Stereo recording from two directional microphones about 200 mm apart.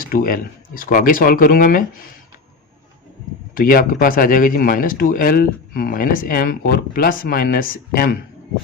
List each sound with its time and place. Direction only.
0.0 s speech: 45° left (ahead or behind)
3.5 s speech: 45° left (ahead or behind)